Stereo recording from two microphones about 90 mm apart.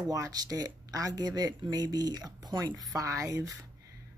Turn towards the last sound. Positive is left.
turn(degrees=-40)  # may be behind; listen again after turning